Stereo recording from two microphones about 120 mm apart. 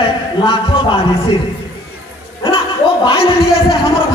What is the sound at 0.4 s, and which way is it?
Speech, 45° left (ahead or behind).